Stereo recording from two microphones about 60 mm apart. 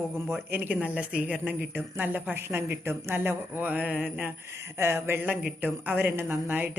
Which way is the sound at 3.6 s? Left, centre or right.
Right.